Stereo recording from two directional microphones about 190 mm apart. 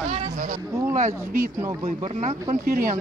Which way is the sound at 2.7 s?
50° right (ahead or behind).